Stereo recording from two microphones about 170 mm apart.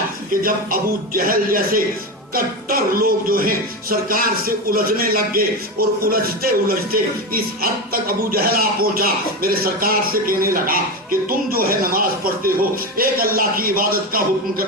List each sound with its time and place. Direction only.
0.4 s speech: 55° right (ahead or behind)